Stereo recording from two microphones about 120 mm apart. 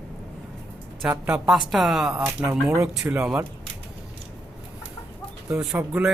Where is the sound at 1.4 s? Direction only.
Centre (ahead or behind).